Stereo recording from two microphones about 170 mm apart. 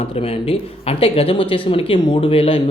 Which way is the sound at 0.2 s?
35° left (ahead or behind).